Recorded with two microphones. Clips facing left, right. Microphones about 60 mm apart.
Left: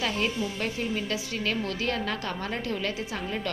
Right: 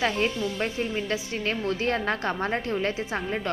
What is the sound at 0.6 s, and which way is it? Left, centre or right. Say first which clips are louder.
A woman's voice: right 2 dB; right.